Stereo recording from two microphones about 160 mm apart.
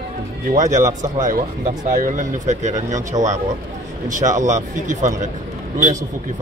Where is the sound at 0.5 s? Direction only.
50° right (ahead or behind).